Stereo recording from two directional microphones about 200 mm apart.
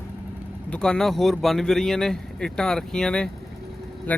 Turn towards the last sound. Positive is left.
turn(degrees=10)  # may be behind; listen again after turning